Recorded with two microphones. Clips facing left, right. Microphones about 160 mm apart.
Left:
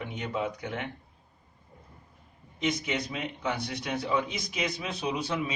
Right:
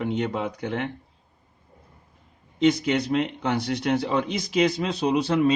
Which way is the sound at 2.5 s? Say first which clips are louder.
Right 9 dB; 75° right (ahead or behind).